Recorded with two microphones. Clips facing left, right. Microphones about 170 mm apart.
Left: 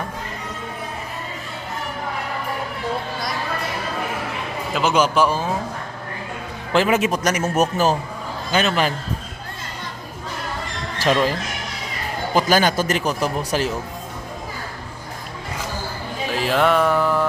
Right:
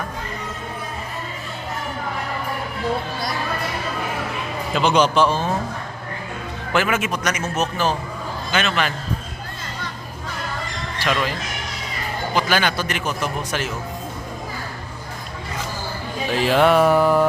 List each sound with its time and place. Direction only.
4.7 s a man's voice: 5° left (ahead or behind)
6.7 s a man's voice: 30° left (ahead or behind)
11.0 s a man's voice: 40° left (ahead or behind)
16.3 s music: centre (ahead or behind)